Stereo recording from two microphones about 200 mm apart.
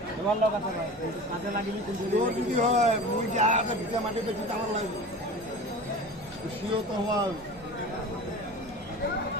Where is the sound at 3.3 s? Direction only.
35° right (ahead or behind).